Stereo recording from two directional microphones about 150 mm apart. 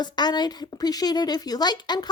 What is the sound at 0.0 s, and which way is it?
A woman's voice, 30° left (ahead or behind).